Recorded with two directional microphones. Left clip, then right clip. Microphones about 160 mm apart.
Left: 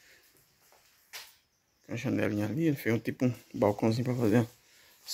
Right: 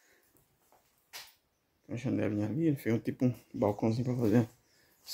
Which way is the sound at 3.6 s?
Centre (ahead or behind).